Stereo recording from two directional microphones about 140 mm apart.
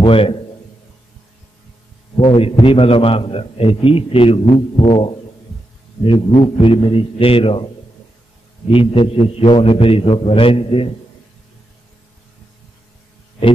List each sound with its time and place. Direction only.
0.0 s a man's voice: 40° left (ahead or behind)
2.1 s a man's voice: 40° left (ahead or behind)
8.6 s a man's voice: 40° left (ahead or behind)